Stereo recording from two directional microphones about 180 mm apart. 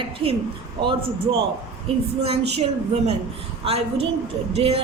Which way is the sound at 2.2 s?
35° right (ahead or behind).